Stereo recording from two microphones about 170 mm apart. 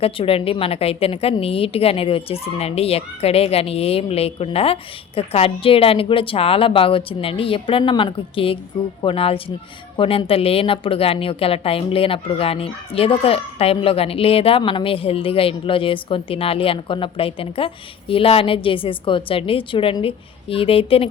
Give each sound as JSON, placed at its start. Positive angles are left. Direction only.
{"t": 0.0, "sound": "a woman's voice", "side_deg": 35}